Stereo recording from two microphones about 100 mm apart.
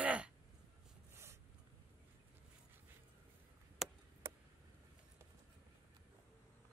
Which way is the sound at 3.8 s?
Centre (ahead or behind).